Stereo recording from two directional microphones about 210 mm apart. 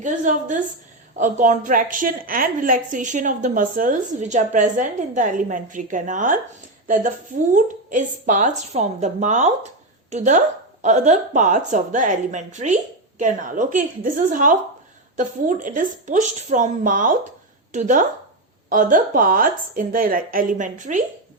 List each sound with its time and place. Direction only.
0.0 s a woman's voice: 35° right (ahead or behind)